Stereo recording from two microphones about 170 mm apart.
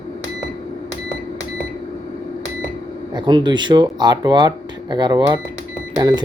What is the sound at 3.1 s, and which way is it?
Speech, 25° right (ahead or behind).